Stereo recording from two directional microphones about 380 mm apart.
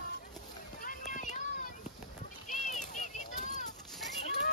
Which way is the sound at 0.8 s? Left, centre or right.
Centre.